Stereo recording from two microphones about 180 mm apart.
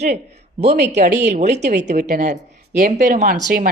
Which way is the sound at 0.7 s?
65° right (ahead or behind).